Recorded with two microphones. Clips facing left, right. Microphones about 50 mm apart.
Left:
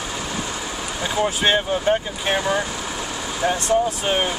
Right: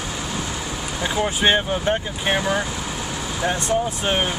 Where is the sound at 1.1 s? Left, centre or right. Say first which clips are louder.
Even; centre.